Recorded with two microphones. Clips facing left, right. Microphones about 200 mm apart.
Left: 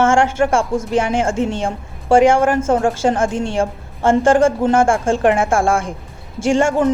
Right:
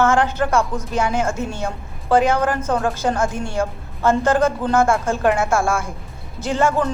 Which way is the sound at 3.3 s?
90° left.